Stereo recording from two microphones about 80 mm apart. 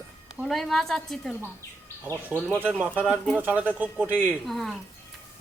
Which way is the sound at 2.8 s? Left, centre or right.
Centre.